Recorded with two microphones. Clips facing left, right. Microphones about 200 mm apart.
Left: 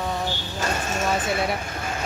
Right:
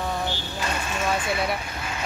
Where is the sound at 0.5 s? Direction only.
45° left (ahead or behind).